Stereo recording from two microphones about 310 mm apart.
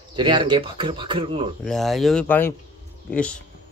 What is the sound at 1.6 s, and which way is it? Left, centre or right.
Speech, centre.